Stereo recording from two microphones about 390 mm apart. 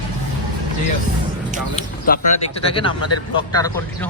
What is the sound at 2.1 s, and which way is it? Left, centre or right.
Speech, left.